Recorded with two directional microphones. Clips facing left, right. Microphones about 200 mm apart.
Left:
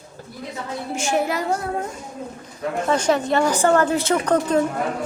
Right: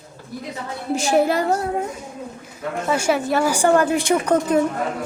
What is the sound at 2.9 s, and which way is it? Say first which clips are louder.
A woman's voice: even; 10° right (ahead or behind).